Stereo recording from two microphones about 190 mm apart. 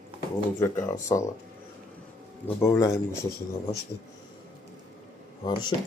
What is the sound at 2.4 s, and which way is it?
Speech, 15° left (ahead or behind).